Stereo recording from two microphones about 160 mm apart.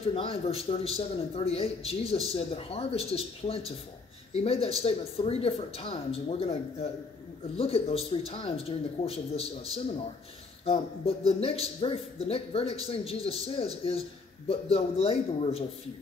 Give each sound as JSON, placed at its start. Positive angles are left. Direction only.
{"t": 0.0, "sound": "a man's voice", "side_deg": 35}